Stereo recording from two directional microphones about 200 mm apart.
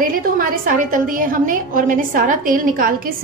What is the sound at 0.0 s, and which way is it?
A woman's voice, 45° right (ahead or behind).